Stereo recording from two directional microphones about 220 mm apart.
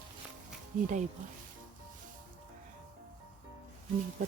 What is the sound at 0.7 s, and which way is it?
Speech, 35° right (ahead or behind).